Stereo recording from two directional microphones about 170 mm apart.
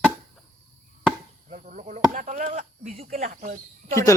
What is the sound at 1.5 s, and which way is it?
Speech, 50° right (ahead or behind).